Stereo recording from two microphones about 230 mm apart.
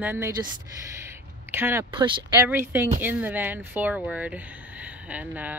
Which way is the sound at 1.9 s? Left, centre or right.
Centre.